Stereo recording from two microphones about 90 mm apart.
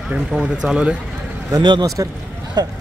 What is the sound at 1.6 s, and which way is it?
Speech, 60° right (ahead or behind).